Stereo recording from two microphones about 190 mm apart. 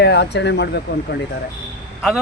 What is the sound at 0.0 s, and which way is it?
Speech, 60° left (ahead or behind).